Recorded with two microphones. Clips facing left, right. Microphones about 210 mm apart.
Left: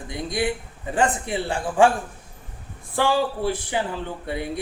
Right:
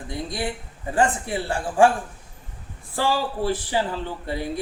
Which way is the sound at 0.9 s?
20° left (ahead or behind).